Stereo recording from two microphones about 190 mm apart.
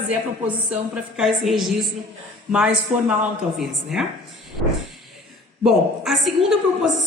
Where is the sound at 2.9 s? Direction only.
35° right (ahead or behind).